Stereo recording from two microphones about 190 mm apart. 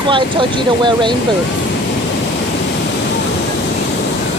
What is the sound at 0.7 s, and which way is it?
Speech, 25° right (ahead or behind).